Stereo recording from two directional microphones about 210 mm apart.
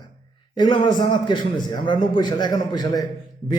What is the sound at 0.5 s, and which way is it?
A man's voice, 20° left (ahead or behind).